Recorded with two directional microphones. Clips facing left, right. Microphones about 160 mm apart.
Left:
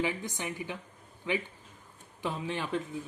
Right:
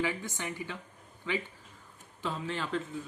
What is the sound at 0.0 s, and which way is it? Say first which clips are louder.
Speech: left 1 dB; 15° left (ahead or behind).